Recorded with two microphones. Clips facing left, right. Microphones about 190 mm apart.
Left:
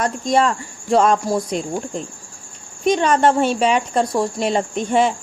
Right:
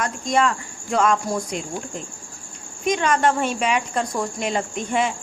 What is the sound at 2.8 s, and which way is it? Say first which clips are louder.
Speech: left 4 dB; 30° left (ahead or behind).